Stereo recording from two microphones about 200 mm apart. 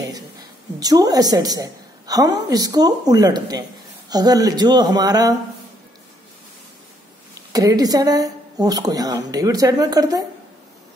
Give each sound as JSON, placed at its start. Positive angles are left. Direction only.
{"t": 0.7, "sound": "a woman's voice", "side_deg": -20}
{"t": 7.3, "sound": "a woman's voice", "side_deg": -20}